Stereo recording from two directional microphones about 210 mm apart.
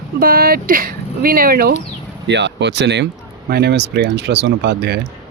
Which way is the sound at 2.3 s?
55° right (ahead or behind).